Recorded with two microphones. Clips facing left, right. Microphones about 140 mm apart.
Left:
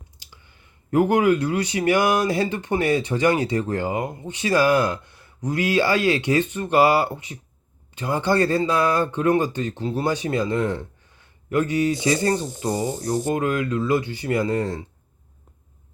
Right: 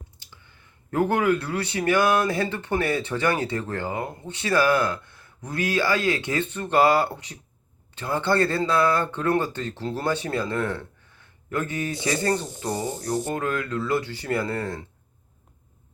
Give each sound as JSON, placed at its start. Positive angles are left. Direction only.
{"t": 0.9, "sound": "speech", "side_deg": 15}